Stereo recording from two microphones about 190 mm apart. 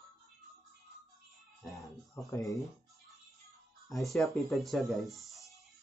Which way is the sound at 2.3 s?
15° left (ahead or behind).